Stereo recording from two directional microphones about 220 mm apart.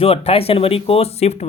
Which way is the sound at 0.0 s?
25° left (ahead or behind).